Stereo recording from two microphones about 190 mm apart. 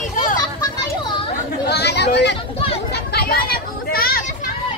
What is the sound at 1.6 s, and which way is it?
Speech, 60° left (ahead or behind).